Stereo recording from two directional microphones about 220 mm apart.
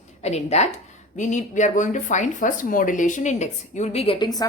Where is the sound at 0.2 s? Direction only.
30° left (ahead or behind).